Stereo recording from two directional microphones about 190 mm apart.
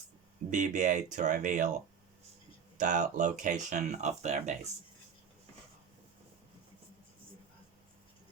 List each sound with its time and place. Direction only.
0.5 s speech: 40° right (ahead or behind)